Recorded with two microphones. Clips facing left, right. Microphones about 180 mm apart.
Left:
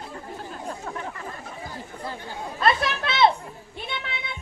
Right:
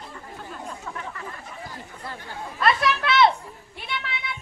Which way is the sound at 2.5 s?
25° left (ahead or behind).